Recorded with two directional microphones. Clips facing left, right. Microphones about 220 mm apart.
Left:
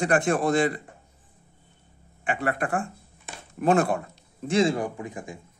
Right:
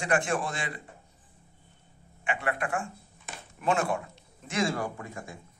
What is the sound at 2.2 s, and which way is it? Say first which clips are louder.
Speech: left 4 dB; 40° left (ahead or behind).